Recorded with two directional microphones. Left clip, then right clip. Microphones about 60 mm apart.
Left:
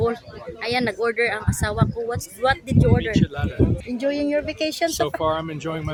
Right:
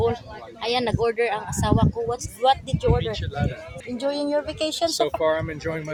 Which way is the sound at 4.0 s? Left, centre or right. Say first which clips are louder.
Left 1 dB; left.